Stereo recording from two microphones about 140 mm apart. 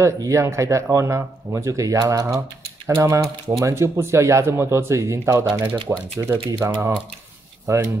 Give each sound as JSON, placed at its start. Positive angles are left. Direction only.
{"t": 0.0, "sound": "speech", "side_deg": -20}